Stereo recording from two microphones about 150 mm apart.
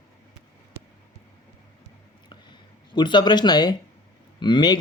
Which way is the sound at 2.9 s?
30° left (ahead or behind).